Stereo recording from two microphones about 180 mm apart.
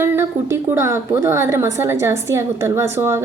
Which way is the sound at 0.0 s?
15° right (ahead or behind).